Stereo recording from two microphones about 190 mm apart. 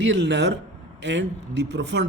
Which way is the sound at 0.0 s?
70° right (ahead or behind).